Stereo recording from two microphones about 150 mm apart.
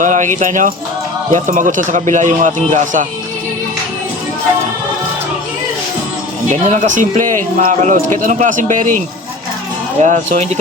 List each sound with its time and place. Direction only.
0.0 s a man's voice: 55° right (ahead or behind)
6.5 s a man's voice: 55° right (ahead or behind)
10.0 s speech: 55° right (ahead or behind)